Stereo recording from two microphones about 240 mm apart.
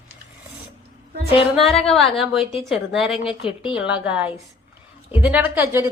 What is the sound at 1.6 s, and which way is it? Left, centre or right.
Speech, left.